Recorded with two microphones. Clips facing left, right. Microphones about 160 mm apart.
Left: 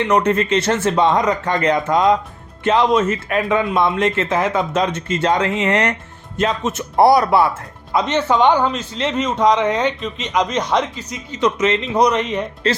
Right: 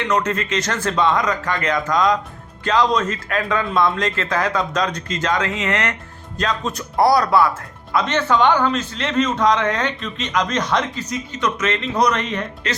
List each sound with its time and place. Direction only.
0.0 s speech: 30° left (ahead or behind)